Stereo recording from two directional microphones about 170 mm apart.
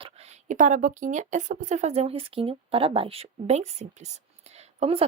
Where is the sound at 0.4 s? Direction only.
45° right (ahead or behind).